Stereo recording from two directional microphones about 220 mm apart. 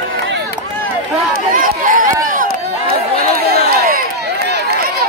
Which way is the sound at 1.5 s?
40° right (ahead or behind).